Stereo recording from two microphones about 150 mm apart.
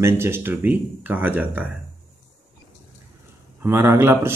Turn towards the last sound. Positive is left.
turn(degrees=-15)  # may be behind; listen again after turning